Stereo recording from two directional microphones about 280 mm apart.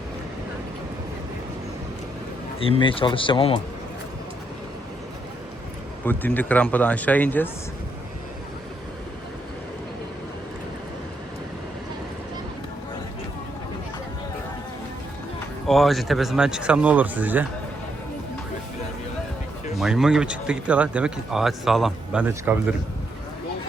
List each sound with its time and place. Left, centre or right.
2.8 s speech: centre
6.1 s speech: centre
15.6 s speech: centre
19.8 s speech: centre